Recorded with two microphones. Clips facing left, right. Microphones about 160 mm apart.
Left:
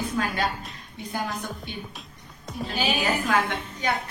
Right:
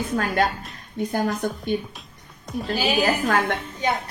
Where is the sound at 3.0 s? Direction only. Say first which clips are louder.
Right 3 dB; 50° right (ahead or behind).